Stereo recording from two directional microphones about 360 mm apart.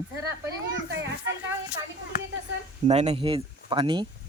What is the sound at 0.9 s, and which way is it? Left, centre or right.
Children playing, right.